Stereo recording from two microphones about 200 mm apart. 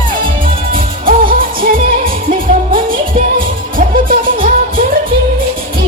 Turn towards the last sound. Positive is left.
turn(degrees=-45)  # may be behind; listen again after turning